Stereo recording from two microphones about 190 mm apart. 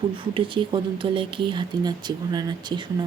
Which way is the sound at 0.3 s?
25° right (ahead or behind).